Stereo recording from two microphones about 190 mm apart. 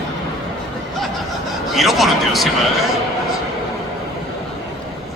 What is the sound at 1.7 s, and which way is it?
Speech, centre (ahead or behind).